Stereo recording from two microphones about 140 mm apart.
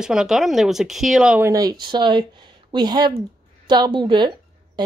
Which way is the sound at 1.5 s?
25° right (ahead or behind).